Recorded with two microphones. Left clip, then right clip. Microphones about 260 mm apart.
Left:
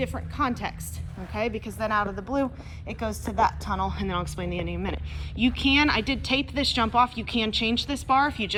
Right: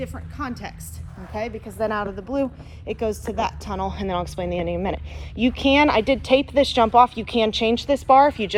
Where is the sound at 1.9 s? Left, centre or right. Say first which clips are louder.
Even; left.